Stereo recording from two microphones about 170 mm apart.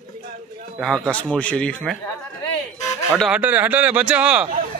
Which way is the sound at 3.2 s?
5° right (ahead or behind).